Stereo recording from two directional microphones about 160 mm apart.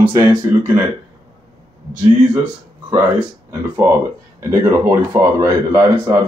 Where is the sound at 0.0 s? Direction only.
15° right (ahead or behind).